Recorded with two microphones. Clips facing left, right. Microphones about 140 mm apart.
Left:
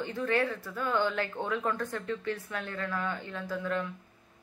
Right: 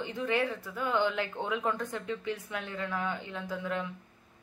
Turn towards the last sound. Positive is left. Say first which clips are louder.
# left 2 dB
turn(degrees=-15)  # may be behind; listen again after turning